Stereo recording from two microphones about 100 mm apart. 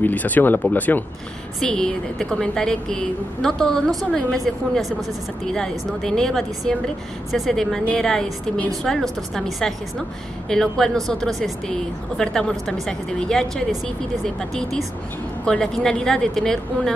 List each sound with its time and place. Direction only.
0.0 s a woman's voice: 15° left (ahead or behind)
1.6 s a woman's voice: 5° left (ahead or behind)